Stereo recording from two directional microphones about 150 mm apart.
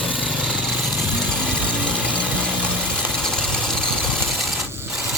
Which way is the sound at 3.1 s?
5° left (ahead or behind).